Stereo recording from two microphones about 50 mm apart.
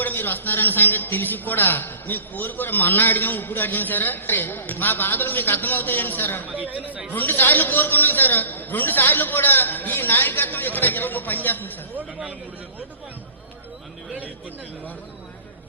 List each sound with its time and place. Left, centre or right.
0.0 s a man's voice: left
6.5 s speech: right
7.1 s a man's voice: left